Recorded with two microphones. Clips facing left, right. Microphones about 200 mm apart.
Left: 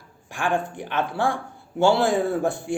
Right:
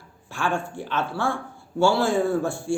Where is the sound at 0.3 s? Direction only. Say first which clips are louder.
Left 2 dB; 15° left (ahead or behind).